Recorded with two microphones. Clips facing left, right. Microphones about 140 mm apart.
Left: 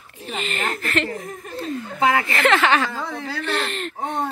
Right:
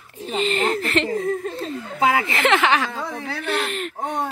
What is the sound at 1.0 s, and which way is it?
Laughter, 25° right (ahead or behind).